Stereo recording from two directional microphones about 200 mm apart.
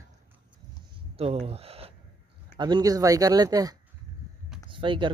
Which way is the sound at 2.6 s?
20° right (ahead or behind).